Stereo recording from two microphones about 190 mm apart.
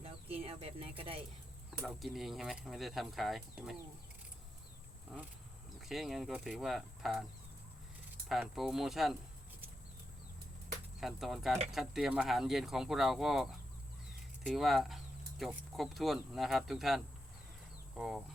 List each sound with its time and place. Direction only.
0.0 s a sound: 30° right (ahead or behind)
1.8 s speech: centre (ahead or behind)
5.8 s speech: centre (ahead or behind)
8.3 s speech: centre (ahead or behind)
11.0 s speech: centre (ahead or behind)